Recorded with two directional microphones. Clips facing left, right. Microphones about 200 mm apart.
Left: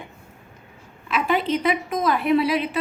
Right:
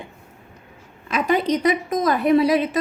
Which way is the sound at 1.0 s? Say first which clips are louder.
Right 3 dB; 40° right (ahead or behind).